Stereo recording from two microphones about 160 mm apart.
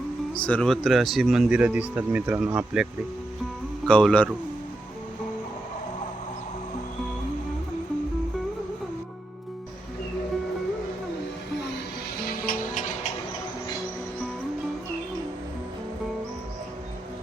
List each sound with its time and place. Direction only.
0.3 s speech: 10° left (ahead or behind)
3.8 s speech: 5° left (ahead or behind)
12.2 s music: 65° left (ahead or behind)